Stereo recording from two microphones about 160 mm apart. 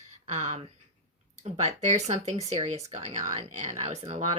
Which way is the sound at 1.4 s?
45° right (ahead or behind).